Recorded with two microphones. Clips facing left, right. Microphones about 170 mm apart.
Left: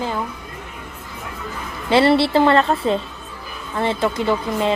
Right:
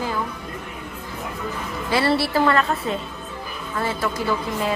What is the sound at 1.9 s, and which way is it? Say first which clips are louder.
A woman's voice: left 6 dB; 25° left (ahead or behind).